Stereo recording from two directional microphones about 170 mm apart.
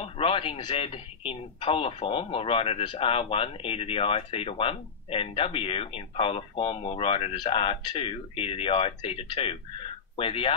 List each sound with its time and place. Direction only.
0.0 s speech: 35° left (ahead or behind)